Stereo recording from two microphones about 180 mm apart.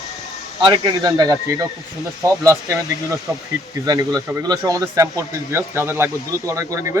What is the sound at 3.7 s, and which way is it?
Speech, 20° right (ahead or behind).